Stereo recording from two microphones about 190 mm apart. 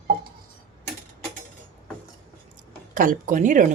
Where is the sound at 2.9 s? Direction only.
45° right (ahead or behind).